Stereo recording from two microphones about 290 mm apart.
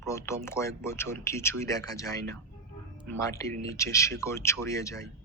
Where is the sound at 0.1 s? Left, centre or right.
Centre.